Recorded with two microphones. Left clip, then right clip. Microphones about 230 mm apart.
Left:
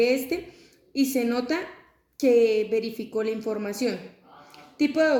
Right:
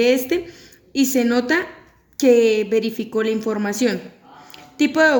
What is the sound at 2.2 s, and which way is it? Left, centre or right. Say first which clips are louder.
A woman's voice: right 5 dB; right.